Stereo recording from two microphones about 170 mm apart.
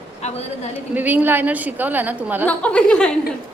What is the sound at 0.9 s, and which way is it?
A woman's voice, 10° right (ahead or behind).